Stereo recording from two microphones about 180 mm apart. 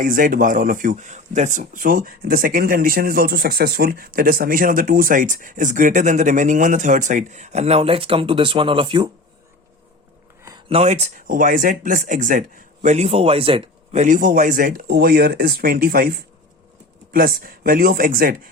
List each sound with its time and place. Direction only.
0.0 s speech: 50° right (ahead or behind); by 9.0 s 30° right (ahead or behind)
10.7 s speech: 35° right (ahead or behind); by 18.3 s 55° right (ahead or behind)